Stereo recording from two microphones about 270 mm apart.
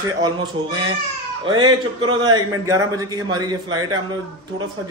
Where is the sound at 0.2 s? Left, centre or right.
Centre.